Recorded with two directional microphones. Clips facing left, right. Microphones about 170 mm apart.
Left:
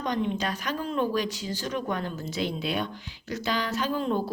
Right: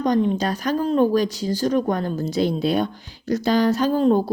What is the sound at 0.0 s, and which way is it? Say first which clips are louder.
Speech: right 8 dB; 40° right (ahead or behind).